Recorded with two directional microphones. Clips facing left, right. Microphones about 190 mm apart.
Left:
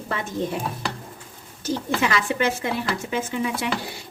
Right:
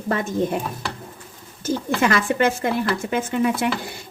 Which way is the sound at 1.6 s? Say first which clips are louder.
Right 3 dB; 50° right (ahead or behind).